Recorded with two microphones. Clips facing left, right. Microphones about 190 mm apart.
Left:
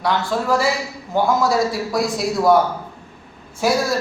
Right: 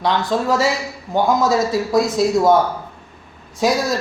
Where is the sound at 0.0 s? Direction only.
20° right (ahead or behind).